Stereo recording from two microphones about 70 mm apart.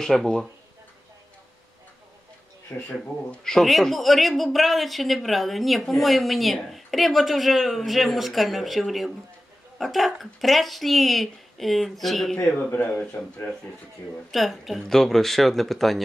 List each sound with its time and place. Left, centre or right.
0.0 s speech: centre
2.7 s speech: left
3.3 s speech: centre
12.4 s speech: left
14.3 s speech: centre